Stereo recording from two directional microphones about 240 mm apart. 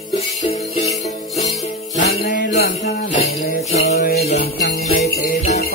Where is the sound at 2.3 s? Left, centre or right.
Left.